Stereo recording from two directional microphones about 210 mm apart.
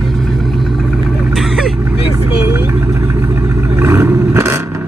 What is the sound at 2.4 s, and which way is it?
Vehicle, 10° right (ahead or behind).